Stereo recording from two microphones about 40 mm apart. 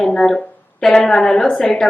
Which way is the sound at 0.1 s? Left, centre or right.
Centre.